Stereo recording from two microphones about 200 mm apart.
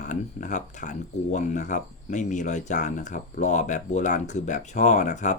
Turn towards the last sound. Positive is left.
turn(degrees=35)  # may be behind; listen again after turning